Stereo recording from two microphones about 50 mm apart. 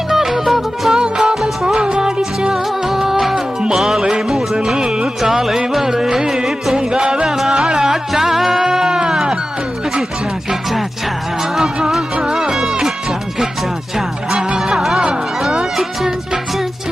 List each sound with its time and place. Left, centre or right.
0.1 s music: centre
10.5 s music: centre